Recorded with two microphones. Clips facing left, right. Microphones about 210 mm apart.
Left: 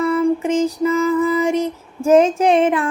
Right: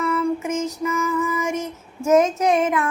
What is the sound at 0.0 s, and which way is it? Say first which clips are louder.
Music: left 5 dB; 35° left (ahead or behind).